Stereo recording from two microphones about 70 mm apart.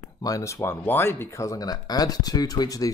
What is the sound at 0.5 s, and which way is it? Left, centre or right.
Speech, left.